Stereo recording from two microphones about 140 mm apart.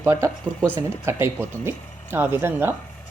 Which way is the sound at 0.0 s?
15° right (ahead or behind).